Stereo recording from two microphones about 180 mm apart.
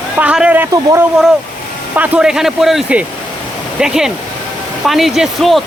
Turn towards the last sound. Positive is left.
turn(degrees=0)  # may be behind; listen again after turning